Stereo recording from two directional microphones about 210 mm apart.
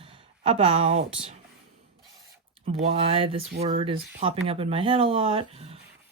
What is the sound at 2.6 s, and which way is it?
Speech, 30° right (ahead or behind).